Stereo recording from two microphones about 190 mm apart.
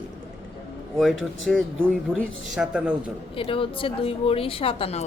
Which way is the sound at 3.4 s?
30° left (ahead or behind).